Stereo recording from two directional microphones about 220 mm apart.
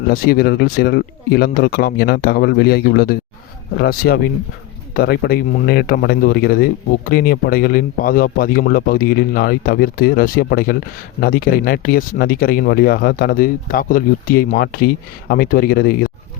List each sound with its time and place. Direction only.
0.1 s speech: 45° left (ahead or behind)